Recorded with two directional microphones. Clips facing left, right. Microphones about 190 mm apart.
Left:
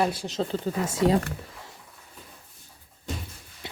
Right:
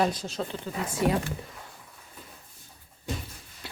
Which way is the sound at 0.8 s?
25° left (ahead or behind).